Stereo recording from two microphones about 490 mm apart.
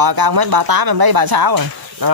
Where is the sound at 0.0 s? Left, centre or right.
Right.